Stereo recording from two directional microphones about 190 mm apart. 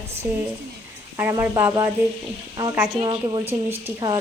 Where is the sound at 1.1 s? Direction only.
15° right (ahead or behind).